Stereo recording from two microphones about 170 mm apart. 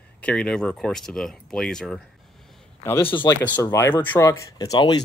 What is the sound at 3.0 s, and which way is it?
Speech, 30° left (ahead or behind).